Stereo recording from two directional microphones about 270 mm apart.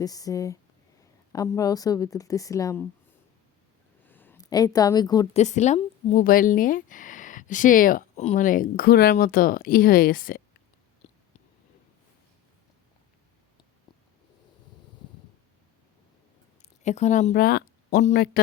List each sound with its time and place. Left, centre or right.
0.0 s a woman's voice: centre
4.0 s a woman's voice: centre
5.4 s speech: left
16.8 s speech: left